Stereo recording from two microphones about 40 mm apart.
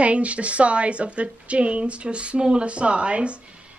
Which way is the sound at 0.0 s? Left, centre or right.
Right.